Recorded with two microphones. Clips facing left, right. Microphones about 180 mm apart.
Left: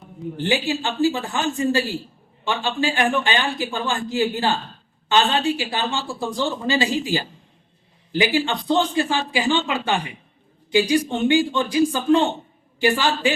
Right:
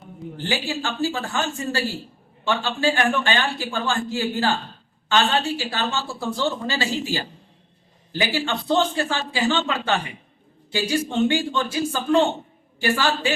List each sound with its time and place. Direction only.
0.3 s a man's voice: 20° left (ahead or behind)